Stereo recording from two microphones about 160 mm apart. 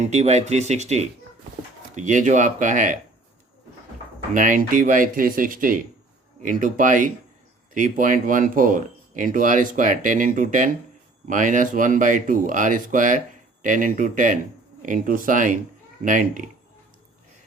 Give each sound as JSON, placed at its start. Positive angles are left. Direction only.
{"t": 0.0, "sound": "speech", "side_deg": -45}
{"t": 4.4, "sound": "speech", "side_deg": -55}